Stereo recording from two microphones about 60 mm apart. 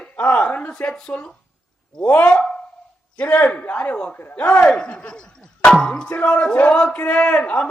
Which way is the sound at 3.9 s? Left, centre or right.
Centre.